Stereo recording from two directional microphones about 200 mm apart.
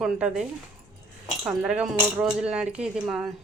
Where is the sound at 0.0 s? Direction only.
5° right (ahead or behind).